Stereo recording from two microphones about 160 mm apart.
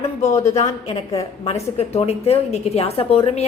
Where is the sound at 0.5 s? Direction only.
40° left (ahead or behind).